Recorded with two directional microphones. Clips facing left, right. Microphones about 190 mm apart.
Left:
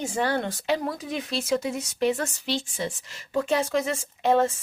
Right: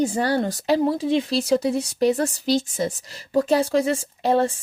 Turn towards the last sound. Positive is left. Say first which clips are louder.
# right 2 dB
turn(degrees=-35)  # may be behind; listen again after turning